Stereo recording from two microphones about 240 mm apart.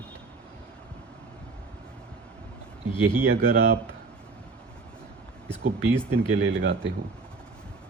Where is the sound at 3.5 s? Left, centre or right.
Right.